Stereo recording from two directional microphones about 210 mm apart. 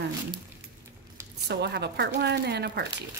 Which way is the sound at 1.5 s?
55° right (ahead or behind).